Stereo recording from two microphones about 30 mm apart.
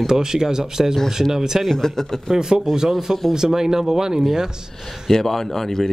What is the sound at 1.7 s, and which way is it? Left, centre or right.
Speech, centre.